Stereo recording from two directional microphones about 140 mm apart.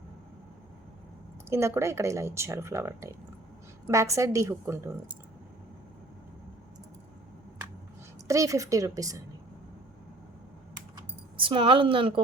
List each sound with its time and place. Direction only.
1.5 s speech: 20° right (ahead or behind)
8.3 s speech: 25° right (ahead or behind)
11.3 s speech: 35° right (ahead or behind)